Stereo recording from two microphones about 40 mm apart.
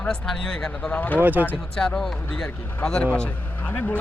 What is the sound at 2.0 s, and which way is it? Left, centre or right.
Speech, centre.